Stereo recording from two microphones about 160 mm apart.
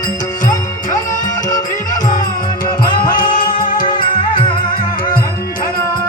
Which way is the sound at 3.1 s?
60° left (ahead or behind).